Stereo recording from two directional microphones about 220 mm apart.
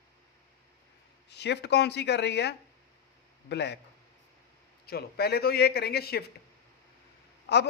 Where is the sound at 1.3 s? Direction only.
50° left (ahead or behind).